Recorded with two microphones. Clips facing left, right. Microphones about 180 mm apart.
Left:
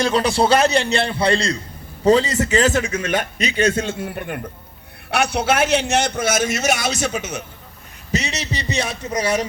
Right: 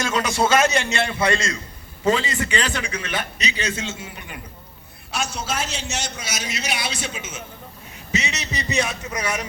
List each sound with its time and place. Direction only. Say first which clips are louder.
0.0 s a man's voice: left 4 dB; 35° left (ahead or behind)
7.1 s a man's voice: left 8 dB; 70° left (ahead or behind)
8.1 s a man's voice: left 3 dB; 35° left (ahead or behind)